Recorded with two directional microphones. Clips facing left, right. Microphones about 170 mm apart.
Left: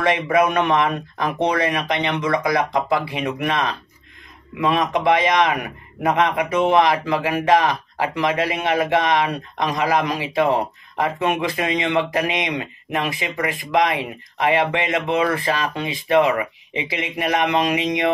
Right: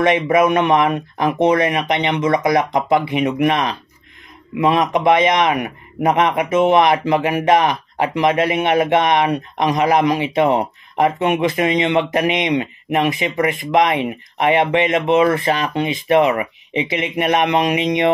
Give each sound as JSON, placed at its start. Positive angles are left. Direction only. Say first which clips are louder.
{"t": 0.0, "sound": "a man's voice", "louder": "right 4 dB", "side_deg": -20}